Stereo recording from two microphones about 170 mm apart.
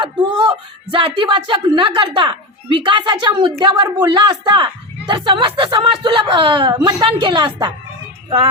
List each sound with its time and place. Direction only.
0.0 s speech: 30° right (ahead or behind)